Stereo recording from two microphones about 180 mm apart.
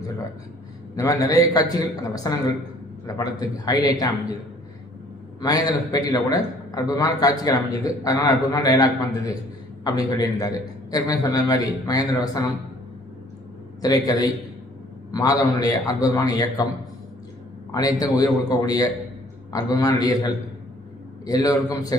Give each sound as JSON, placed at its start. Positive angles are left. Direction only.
{"t": 0.9, "sound": "a man's voice", "side_deg": 20}
{"t": 5.4, "sound": "a man's voice", "side_deg": 20}
{"t": 13.8, "sound": "a man's voice", "side_deg": 20}
{"t": 17.7, "sound": "a man's voice", "side_deg": 20}